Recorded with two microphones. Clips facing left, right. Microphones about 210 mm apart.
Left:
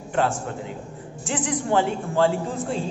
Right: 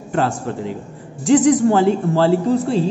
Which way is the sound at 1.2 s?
40° right (ahead or behind).